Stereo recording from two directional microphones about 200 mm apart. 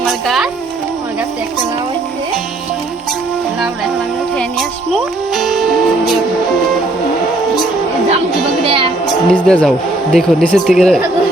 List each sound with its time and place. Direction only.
0.0 s music: centre (ahead or behind)
4.9 s music: centre (ahead or behind)
8.6 s music: 25° right (ahead or behind)
9.3 s speech: 5° left (ahead or behind)